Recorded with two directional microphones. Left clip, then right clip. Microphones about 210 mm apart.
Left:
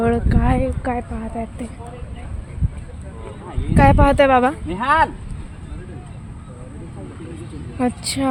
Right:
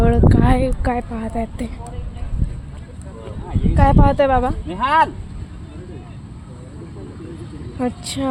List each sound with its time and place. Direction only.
0.0 s a sound: centre (ahead or behind)
0.8 s speech: 5° right (ahead or behind)
3.8 s speech: 10° left (ahead or behind)
4.1 s speech: 25° left (ahead or behind)
4.7 s speech: 5° right (ahead or behind)
7.8 s speech: 10° left (ahead or behind)